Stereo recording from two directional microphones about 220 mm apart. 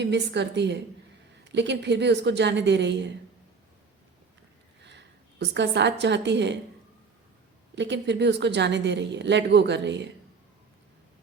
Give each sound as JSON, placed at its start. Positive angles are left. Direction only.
{"t": 0.0, "sound": "a woman's voice", "side_deg": -50}
{"t": 4.9, "sound": "a woman's voice", "side_deg": -50}
{"t": 7.8, "sound": "a woman's voice", "side_deg": -50}